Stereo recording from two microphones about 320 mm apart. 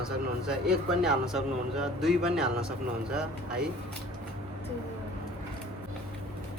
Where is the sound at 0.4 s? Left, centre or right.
Centre.